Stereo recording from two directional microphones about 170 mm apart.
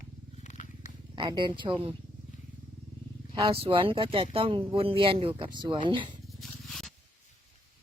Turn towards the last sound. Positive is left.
turn(degrees=0)  # may be behind; listen again after turning